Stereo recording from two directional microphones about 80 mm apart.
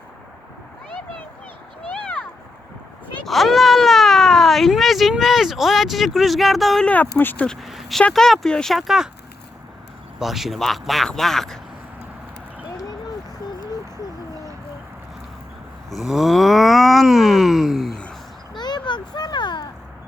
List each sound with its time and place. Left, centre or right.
3.2 s speech: centre
6.8 s speech: left
7.4 s speech: centre
7.7 s a sound: centre
8.1 s groan: centre
10.2 s groan: centre
15.9 s groan: centre
17.9 s a sound: centre
18.5 s a sound: left